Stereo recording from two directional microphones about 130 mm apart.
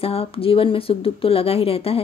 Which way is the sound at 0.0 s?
50° left (ahead or behind).